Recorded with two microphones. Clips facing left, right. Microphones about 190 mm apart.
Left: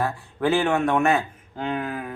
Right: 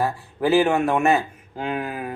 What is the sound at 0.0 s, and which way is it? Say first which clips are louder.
Speech: right 1 dB; 5° right (ahead or behind).